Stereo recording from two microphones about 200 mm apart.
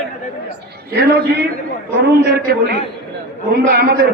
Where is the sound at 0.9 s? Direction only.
50° right (ahead or behind).